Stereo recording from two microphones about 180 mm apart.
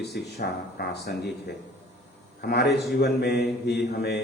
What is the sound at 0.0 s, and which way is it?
A man's voice, 65° left (ahead or behind).